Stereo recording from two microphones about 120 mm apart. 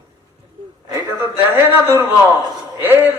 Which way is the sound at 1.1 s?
20° right (ahead or behind).